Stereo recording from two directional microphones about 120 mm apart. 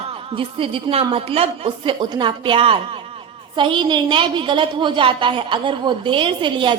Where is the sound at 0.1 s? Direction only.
50° right (ahead or behind).